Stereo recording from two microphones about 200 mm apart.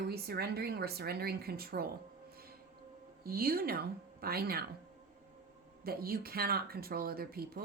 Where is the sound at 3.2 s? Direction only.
50° right (ahead or behind).